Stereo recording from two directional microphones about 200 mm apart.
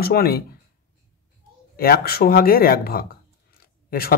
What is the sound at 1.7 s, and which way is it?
Speech, 50° left (ahead or behind).